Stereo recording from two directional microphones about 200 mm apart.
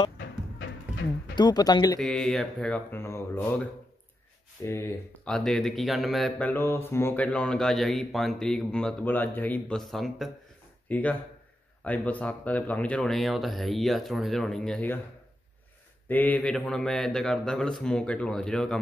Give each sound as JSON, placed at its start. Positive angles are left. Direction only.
{"t": 0.6, "sound": "music", "side_deg": 70}
{"t": 1.3, "sound": "speech", "side_deg": 20}
{"t": 2.0, "sound": "speech", "side_deg": 0}
{"t": 4.6, "sound": "speech", "side_deg": 10}
{"t": 16.1, "sound": "speech", "side_deg": 10}